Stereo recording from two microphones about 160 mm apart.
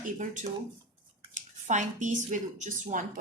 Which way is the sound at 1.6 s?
50° right (ahead or behind).